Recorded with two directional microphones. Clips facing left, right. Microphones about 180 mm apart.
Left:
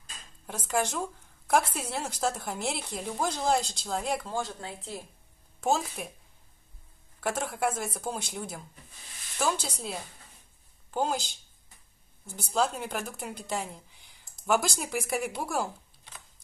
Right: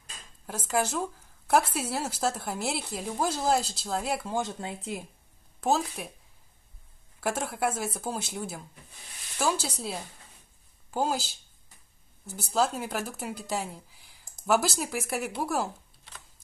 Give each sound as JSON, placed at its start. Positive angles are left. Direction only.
{"t": 0.5, "sound": "a woman's voice", "side_deg": -5}
{"t": 4.4, "sound": "speech", "side_deg": -20}
{"t": 5.6, "sound": "speech", "side_deg": 0}
{"t": 7.2, "sound": "a woman's voice", "side_deg": -10}